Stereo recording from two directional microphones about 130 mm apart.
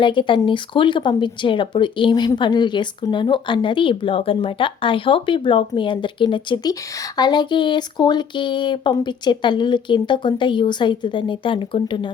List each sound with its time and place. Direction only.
0.0 s speech: 40° left (ahead or behind)